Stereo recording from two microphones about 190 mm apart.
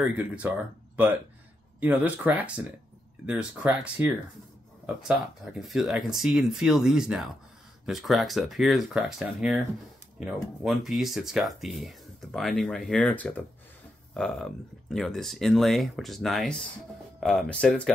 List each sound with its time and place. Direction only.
0.0 s speech: 10° right (ahead or behind)